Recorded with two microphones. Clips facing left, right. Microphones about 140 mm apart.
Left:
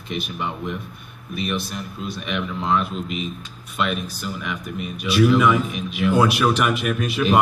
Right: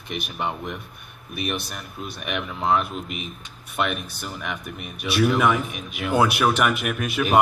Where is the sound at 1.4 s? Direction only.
60° right (ahead or behind).